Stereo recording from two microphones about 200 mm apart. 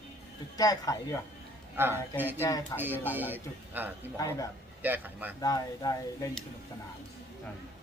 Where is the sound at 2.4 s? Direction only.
20° left (ahead or behind).